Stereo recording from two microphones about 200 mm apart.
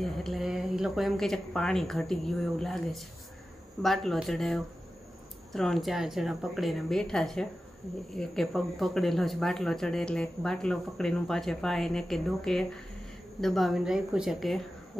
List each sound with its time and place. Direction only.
0.0 s speech: centre (ahead or behind)